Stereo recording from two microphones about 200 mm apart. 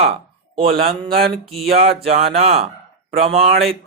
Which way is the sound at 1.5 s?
30° right (ahead or behind).